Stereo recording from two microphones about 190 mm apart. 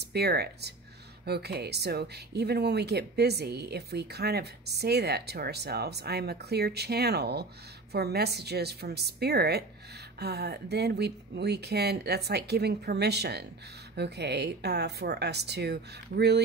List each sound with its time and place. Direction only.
0.0 s speech: 60° right (ahead or behind)